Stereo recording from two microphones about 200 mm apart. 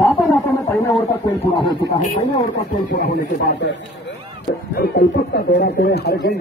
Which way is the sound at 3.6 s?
60° left (ahead or behind).